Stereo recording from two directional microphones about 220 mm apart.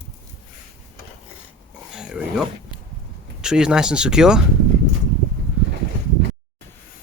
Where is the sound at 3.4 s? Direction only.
5° right (ahead or behind).